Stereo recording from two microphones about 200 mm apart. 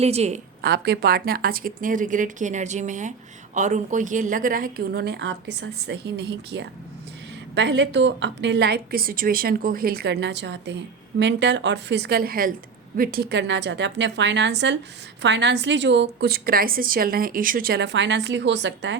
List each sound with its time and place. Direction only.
0.0 s a woman's voice: 30° right (ahead or behind)
0.6 s a woman's voice: 55° right (ahead or behind)